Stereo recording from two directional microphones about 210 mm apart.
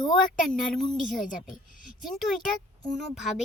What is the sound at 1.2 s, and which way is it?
Speech, 40° left (ahead or behind).